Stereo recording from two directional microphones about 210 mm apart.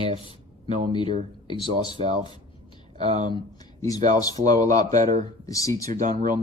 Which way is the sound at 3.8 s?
15° left (ahead or behind).